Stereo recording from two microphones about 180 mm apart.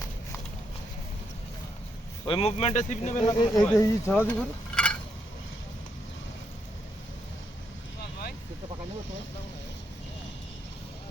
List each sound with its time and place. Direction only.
2.2 s speech: 30° left (ahead or behind)
3.2 s speech: 20° left (ahead or behind)
4.1 s stir: 5° left (ahead or behind)